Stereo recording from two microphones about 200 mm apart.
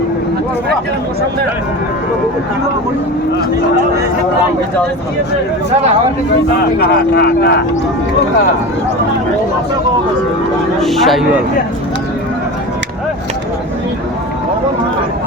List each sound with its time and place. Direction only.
6.7 s speech: 50° left (ahead or behind)
10.8 s speech: centre (ahead or behind)